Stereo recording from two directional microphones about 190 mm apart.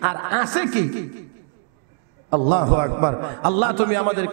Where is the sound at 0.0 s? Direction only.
20° right (ahead or behind).